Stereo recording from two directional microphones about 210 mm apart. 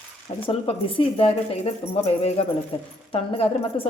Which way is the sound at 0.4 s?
25° left (ahead or behind).